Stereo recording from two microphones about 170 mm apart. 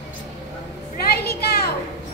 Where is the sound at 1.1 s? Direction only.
65° left (ahead or behind).